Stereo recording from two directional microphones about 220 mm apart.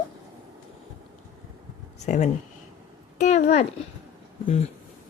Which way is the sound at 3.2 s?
30° left (ahead or behind).